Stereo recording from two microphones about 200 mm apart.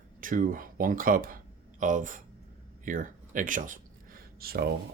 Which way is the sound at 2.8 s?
40° right (ahead or behind).